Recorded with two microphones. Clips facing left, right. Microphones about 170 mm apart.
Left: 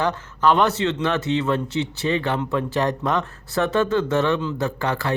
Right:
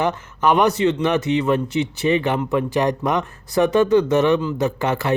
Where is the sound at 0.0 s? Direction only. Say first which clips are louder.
Right 1 dB; 20° right (ahead or behind).